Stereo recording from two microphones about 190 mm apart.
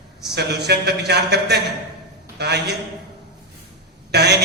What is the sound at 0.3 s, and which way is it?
Speech, 60° right (ahead or behind).